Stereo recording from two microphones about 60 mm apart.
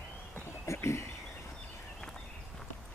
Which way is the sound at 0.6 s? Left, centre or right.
Left.